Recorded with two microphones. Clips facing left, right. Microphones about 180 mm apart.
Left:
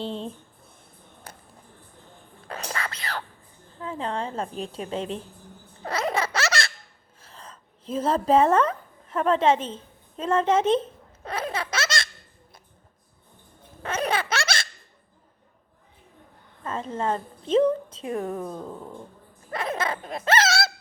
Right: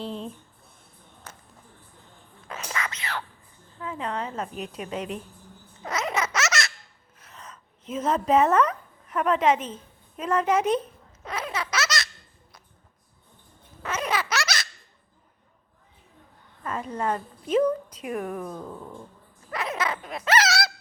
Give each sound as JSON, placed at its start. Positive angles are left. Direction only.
{"t": 0.0, "sound": "speech", "side_deg": 30}
{"t": 2.5, "sound": "a sound", "side_deg": 40}
{"t": 3.8, "sound": "a woman's voice", "side_deg": 30}
{"t": 5.8, "sound": "baby laughter", "side_deg": 35}
{"t": 7.2, "sound": "a woman's voice", "side_deg": 30}
{"t": 11.2, "sound": "a sound", "side_deg": 30}
{"t": 11.5, "sound": "baby laughter", "side_deg": 30}
{"t": 13.8, "sound": "baby laughter", "side_deg": 30}
{"t": 16.6, "sound": "a woman's voice", "side_deg": 25}
{"t": 19.8, "sound": "baby laughter", "side_deg": 30}
{"t": 20.2, "sound": "speech", "side_deg": 25}